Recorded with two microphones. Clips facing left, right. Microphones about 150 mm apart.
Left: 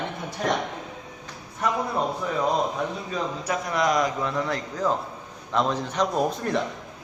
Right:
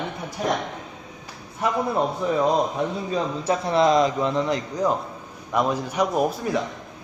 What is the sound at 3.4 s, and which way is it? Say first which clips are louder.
A man's voice: right 6 dB; 30° right (ahead or behind).